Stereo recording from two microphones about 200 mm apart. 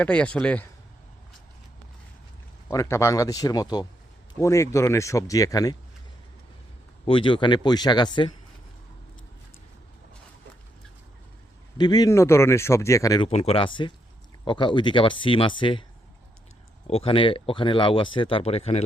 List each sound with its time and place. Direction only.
0.0 s a man's voice: 5° left (ahead or behind)
2.6 s speech: 15° left (ahead or behind)
7.0 s speech: 25° left (ahead or behind)
11.8 s speech: 20° left (ahead or behind)
13.2 s speech: 30° left (ahead or behind)
16.8 s speech: 30° left (ahead or behind)